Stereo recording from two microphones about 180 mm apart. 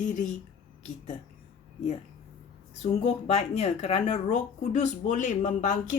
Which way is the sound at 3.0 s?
35° left (ahead or behind).